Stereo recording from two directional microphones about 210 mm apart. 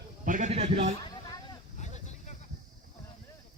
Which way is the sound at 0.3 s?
35° right (ahead or behind).